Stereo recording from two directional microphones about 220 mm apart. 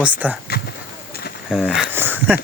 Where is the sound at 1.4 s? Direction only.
Centre (ahead or behind).